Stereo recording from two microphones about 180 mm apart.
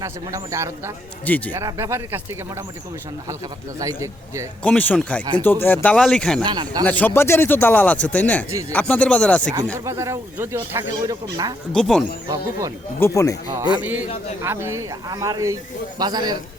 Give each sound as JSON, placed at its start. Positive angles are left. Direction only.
{"t": 0.0, "sound": "speech", "side_deg": -20}
{"t": 1.2, "sound": "speech", "side_deg": 10}
{"t": 1.5, "sound": "speech", "side_deg": -15}
{"t": 3.8, "sound": "speech", "side_deg": -20}
{"t": 4.6, "sound": "speech", "side_deg": 10}
{"t": 6.4, "sound": "speech", "side_deg": -25}
{"t": 6.8, "sound": "speech", "side_deg": 10}
{"t": 9.7, "sound": "speech", "side_deg": -15}
{"t": 11.7, "sound": "speech", "side_deg": 5}
{"t": 12.3, "sound": "speech", "side_deg": -20}
{"t": 13.0, "sound": "speech", "side_deg": 15}
{"t": 13.5, "sound": "speech", "side_deg": -25}